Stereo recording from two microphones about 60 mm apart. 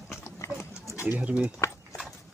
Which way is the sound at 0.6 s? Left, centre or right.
Left.